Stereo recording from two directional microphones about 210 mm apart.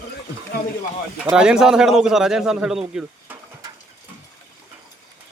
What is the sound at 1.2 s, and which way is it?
A man's voice, 5° right (ahead or behind).